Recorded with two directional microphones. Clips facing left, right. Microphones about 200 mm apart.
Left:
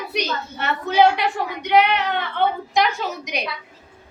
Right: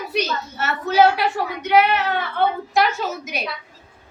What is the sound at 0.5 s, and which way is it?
Speech, 5° right (ahead or behind).